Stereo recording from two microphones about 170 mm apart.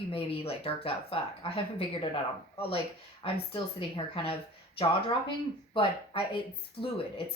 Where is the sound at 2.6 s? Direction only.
35° left (ahead or behind).